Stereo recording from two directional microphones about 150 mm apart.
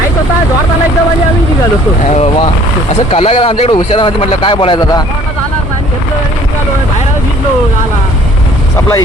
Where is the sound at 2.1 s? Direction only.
50° left (ahead or behind); by 5.0 s 30° left (ahead or behind).